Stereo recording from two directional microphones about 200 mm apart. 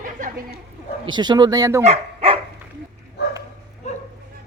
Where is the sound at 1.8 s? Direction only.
30° right (ahead or behind).